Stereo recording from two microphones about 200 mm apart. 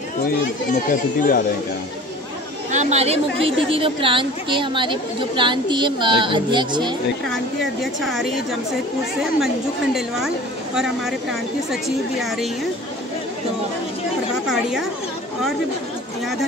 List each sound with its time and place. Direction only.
0.8 s speech: 45° left (ahead or behind)
2.7 s a woman's voice: 35° right (ahead or behind)
7.8 s a woman's voice: centre (ahead or behind)
9.9 s a woman's voice: centre (ahead or behind)
14.5 s speech: centre (ahead or behind)